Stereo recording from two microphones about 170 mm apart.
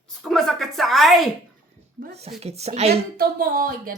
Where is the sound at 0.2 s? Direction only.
Centre (ahead or behind).